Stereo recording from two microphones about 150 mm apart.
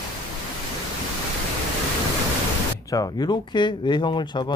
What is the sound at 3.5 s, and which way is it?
Speech, 30° left (ahead or behind).